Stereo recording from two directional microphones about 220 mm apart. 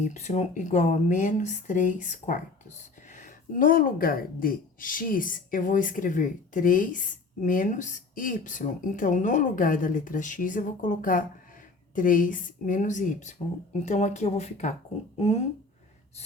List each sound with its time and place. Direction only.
0.0 s speech: 30° left (ahead or behind)